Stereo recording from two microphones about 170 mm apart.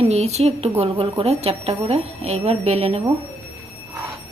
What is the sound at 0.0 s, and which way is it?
A woman's voice, 40° right (ahead or behind).